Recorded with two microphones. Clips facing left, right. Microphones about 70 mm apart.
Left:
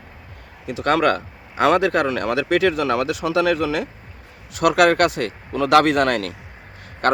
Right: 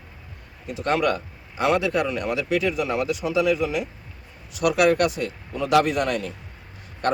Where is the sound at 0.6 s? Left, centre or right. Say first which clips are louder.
Left 4 dB; left.